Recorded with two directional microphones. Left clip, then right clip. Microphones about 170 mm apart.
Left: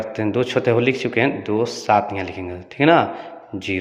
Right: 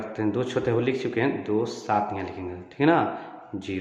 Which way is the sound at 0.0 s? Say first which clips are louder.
Left 6 dB; 25° left (ahead or behind).